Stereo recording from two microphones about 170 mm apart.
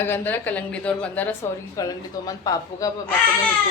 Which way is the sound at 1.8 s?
20° left (ahead or behind).